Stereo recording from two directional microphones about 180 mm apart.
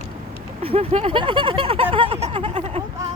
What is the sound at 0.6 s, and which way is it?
Speech, 35° right (ahead or behind).